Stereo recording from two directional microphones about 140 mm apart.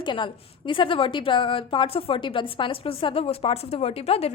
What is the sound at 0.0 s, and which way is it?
A woman's voice, 35° left (ahead or behind).